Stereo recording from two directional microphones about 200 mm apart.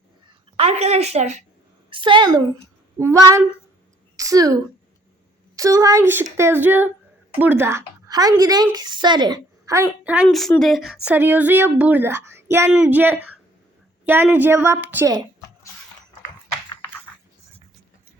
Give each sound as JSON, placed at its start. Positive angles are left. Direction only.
{"t": 0.5, "sound": "a woman's voice", "side_deg": -30}
{"t": 1.9, "sound": "a child's voice", "side_deg": -25}
{"t": 10.2, "sound": "speech", "side_deg": 5}